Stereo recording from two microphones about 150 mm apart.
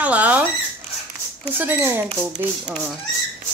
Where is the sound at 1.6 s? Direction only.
15° right (ahead or behind).